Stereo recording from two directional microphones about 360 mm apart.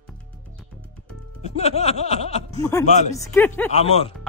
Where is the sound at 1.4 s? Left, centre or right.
Centre.